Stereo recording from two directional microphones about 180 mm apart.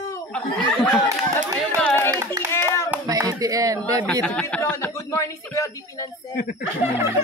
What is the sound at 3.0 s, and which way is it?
Speech, 20° right (ahead or behind).